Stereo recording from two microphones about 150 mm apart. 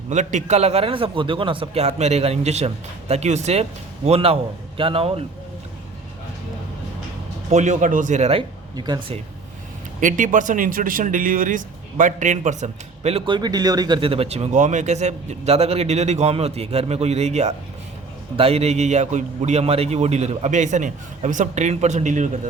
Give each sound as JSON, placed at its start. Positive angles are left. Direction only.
{"t": 0.1, "sound": "a man's voice", "side_deg": -55}
{"t": 7.5, "sound": "a man's voice", "side_deg": -55}
{"t": 8.7, "sound": "speech", "side_deg": -30}
{"t": 10.0, "sound": "a man's voice", "side_deg": -60}